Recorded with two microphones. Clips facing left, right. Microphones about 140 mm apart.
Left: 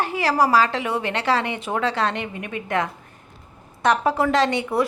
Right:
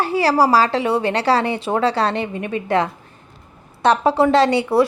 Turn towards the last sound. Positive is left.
turn(degrees=-35)  # may be behind; listen again after turning